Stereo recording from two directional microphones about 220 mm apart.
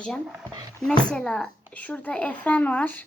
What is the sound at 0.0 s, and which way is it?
Speech, centre (ahead or behind).